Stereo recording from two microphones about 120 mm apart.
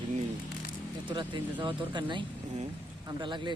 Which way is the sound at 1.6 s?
40° right (ahead or behind).